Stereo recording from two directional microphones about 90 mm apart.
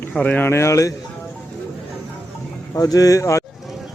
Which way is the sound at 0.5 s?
35° left (ahead or behind).